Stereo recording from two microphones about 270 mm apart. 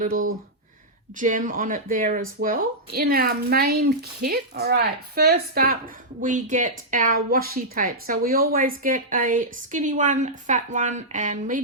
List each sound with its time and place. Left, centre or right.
0.0 s speech: right